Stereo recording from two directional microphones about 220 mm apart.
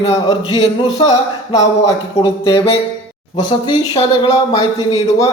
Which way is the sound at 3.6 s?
20° left (ahead or behind).